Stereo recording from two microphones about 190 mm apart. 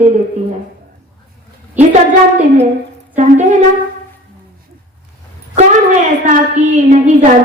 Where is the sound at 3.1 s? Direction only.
40° right (ahead or behind).